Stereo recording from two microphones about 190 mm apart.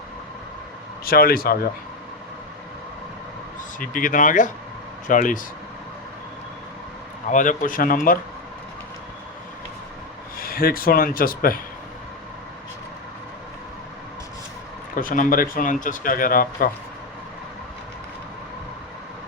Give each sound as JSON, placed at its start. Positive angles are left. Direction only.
{"t": 1.0, "sound": "speech", "side_deg": 50}
{"t": 3.8, "sound": "speech", "side_deg": 45}
{"t": 7.3, "sound": "speech", "side_deg": 40}
{"t": 10.3, "sound": "speech", "side_deg": 50}
{"t": 14.9, "sound": "speech", "side_deg": 45}